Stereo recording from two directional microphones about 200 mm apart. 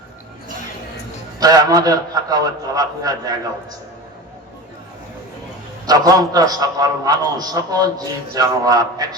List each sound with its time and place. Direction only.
1.4 s a man's voice: 20° right (ahead or behind)
5.8 s a man's voice: 20° right (ahead or behind)